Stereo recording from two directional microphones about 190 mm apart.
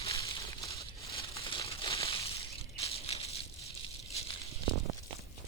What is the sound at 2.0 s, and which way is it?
Crushing, 30° left (ahead or behind).